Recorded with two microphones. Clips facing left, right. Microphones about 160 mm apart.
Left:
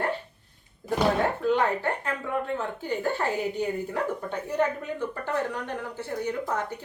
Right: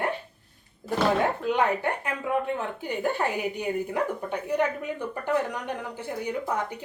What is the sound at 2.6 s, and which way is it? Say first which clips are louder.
Speech: even; 15° right (ahead or behind).